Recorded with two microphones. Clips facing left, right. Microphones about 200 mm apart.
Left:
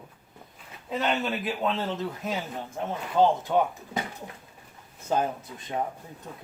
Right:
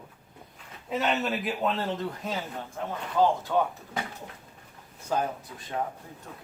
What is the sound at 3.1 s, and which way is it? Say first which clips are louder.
Speech: left 2 dB; 20° left (ahead or behind).